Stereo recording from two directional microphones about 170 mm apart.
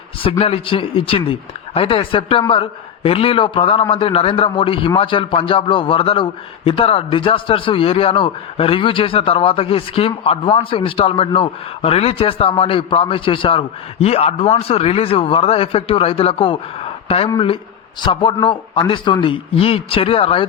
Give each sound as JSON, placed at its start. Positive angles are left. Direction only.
{"t": 0.2, "sound": "a man's voice", "side_deg": 35}